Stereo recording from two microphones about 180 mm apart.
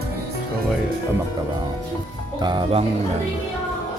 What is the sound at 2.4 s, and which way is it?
Speech, 35° right (ahead or behind).